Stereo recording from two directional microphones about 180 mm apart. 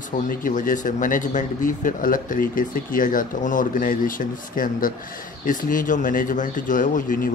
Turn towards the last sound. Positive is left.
turn(degrees=50)  # may be behind; listen again after turning